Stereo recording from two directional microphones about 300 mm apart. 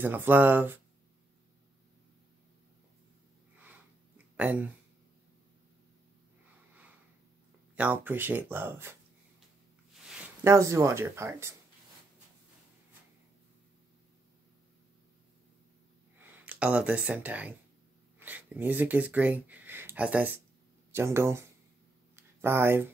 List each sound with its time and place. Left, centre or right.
0.0 s speech: centre
3.5 s sniff: centre
4.4 s speech: centre
7.7 s speech: centre
10.0 s speech: centre
16.2 s speech: centre
22.1 s a sound: centre